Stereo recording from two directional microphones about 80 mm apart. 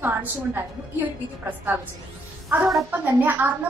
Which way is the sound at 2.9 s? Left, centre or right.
Right.